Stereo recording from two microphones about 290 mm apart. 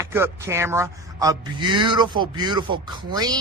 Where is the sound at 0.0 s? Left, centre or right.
Centre.